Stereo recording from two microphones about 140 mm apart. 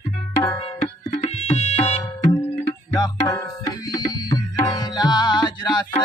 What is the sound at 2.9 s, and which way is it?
Music, 25° left (ahead or behind).